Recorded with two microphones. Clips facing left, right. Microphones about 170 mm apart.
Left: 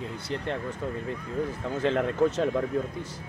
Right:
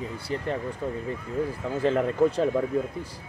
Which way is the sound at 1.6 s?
5° right (ahead or behind).